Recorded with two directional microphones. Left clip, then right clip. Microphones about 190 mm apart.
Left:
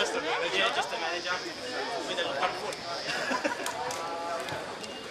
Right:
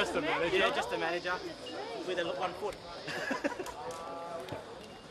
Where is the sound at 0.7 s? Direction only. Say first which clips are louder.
Left 2 dB; 20° left (ahead or behind).